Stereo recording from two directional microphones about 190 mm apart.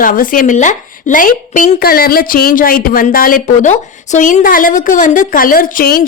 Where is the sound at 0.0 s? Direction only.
45° left (ahead or behind).